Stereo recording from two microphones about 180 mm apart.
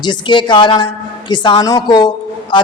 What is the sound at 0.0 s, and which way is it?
A man's voice, 25° left (ahead or behind).